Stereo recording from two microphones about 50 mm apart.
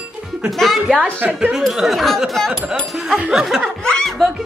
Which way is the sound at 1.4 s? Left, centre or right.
Centre.